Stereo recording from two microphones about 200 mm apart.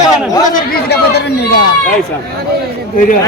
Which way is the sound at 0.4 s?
45° left (ahead or behind).